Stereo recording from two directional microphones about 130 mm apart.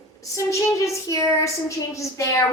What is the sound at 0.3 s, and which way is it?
A woman's voice, 25° left (ahead or behind).